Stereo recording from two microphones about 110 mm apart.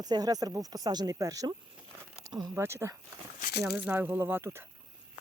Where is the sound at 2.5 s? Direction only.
20° right (ahead or behind).